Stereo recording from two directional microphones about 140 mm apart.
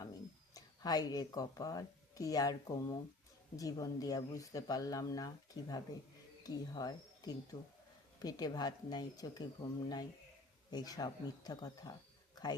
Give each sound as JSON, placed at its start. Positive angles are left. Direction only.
{"t": 0.0, "sound": "speech", "side_deg": 30}
{"t": 10.7, "sound": "speech", "side_deg": 30}
{"t": 12.3, "sound": "a sound", "side_deg": 30}